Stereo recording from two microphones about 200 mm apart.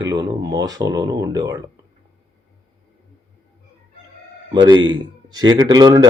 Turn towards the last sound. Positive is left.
turn(degrees=-20)  # may be behind; listen again after turning